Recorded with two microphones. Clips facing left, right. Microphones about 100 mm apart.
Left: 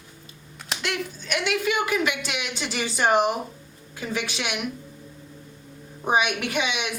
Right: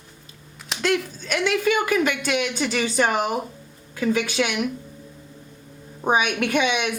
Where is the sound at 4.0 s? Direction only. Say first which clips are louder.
Right 7 dB; 50° right (ahead or behind).